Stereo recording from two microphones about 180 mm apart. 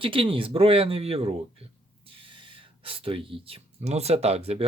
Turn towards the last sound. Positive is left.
turn(degrees=-35)  # may be behind; listen again after turning